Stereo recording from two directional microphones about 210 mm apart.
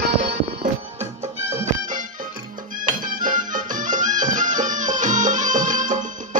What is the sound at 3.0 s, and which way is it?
Music, 40° right (ahead or behind).